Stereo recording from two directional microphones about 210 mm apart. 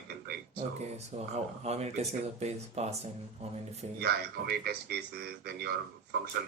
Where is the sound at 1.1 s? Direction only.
30° right (ahead or behind).